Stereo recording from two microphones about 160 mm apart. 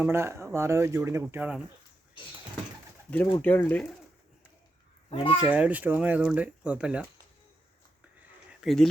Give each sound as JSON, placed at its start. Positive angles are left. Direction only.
{"t": 0.1, "sound": "speech", "side_deg": -15}
{"t": 3.1, "sound": "speech", "side_deg": 10}
{"t": 5.0, "sound": "a child's voice", "side_deg": 35}
{"t": 5.4, "sound": "speech", "side_deg": -5}
{"t": 8.6, "sound": "speech", "side_deg": 0}